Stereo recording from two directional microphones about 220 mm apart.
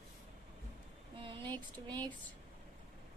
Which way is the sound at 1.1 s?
25° right (ahead or behind).